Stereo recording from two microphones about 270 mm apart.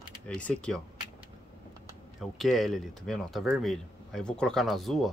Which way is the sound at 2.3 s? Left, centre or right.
Centre.